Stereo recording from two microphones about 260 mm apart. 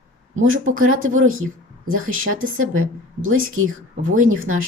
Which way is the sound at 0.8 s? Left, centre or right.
Right.